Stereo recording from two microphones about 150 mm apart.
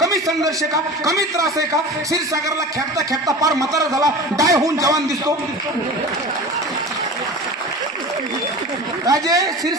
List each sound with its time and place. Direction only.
0.0 s a man's voice: 20° right (ahead or behind)
3.1 s a man's voice: 20° right (ahead or behind)
9.0 s a man's voice: 25° right (ahead or behind)